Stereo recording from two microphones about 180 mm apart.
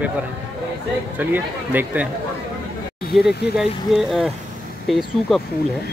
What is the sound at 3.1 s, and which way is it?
Speech, 5° right (ahead or behind).